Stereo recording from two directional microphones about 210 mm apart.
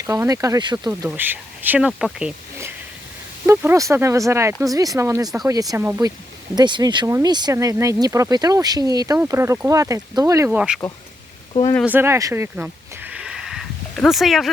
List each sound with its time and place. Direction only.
0.0 s speech: 15° right (ahead or behind)
11.9 s speech: 10° right (ahead or behind)